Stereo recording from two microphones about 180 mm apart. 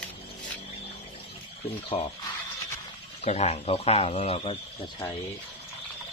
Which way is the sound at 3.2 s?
35° left (ahead or behind).